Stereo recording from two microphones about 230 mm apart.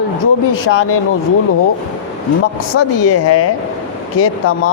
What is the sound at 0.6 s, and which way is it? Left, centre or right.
Speech, left.